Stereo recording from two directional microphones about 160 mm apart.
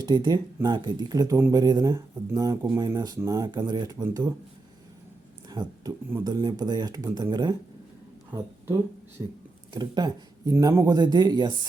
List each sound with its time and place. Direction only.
0.0 s speech: 25° right (ahead or behind)
5.5 s a sound: 25° right (ahead or behind)
6.2 s speech: 25° right (ahead or behind)
8.3 s speech: 15° right (ahead or behind)